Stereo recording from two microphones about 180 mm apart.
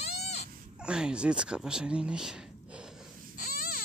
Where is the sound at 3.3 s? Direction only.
55° left (ahead or behind).